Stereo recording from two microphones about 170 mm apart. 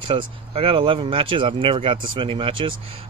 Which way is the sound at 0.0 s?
30° right (ahead or behind).